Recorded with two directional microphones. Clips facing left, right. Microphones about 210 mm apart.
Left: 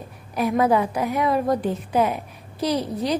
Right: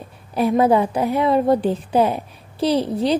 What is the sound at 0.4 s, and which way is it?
A woman's voice, 30° right (ahead or behind).